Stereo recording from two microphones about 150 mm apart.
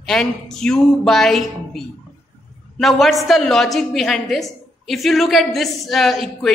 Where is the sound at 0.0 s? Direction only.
Centre (ahead or behind).